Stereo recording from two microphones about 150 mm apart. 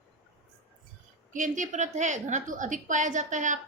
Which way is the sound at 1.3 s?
55° right (ahead or behind).